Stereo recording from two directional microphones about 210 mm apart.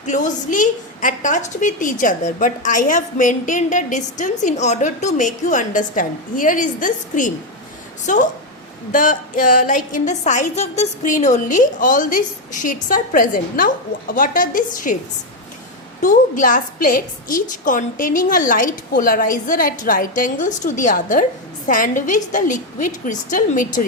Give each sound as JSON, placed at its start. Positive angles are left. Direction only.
{"t": 0.0, "sound": "a woman's voice", "side_deg": 35}
{"t": 16.0, "sound": "a woman's voice", "side_deg": 40}